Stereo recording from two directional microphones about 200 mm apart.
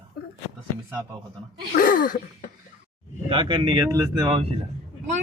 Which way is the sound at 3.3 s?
25° right (ahead or behind).